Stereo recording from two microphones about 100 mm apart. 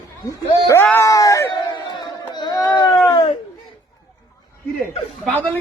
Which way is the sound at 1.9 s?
50° left (ahead or behind).